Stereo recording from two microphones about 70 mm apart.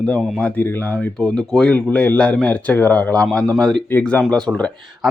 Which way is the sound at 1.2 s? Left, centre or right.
Centre.